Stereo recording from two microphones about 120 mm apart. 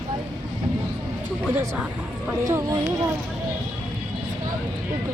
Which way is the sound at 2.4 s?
30° right (ahead or behind).